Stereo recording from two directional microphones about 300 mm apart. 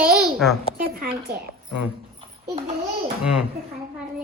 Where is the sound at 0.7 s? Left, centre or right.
Right.